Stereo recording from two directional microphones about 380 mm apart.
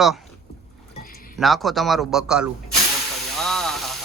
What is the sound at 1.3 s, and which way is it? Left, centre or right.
Speech, centre.